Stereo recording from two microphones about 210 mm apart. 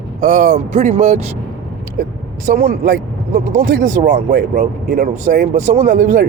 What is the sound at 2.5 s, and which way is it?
Speech, 45° right (ahead or behind).